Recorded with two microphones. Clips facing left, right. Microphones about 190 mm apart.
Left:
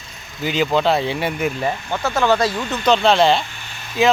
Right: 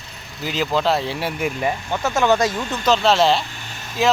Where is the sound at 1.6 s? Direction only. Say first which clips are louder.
Even; 15° right (ahead or behind).